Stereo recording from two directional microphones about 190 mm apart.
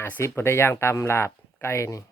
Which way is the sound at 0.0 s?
10° left (ahead or behind).